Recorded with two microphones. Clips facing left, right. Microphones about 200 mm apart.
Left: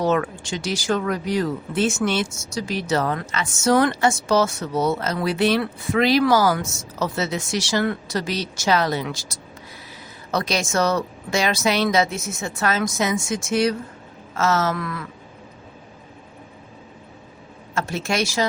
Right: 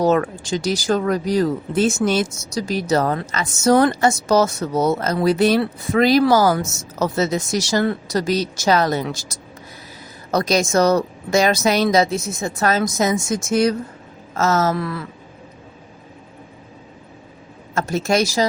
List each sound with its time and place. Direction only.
0.0 s speech: 35° right (ahead or behind)
17.7 s speech: 40° right (ahead or behind)